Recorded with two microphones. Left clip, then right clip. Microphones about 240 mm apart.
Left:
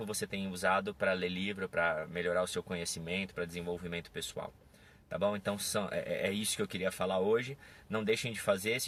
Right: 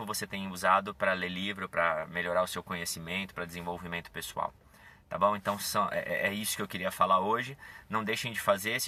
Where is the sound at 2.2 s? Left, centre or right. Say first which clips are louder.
Right 3 dB; right.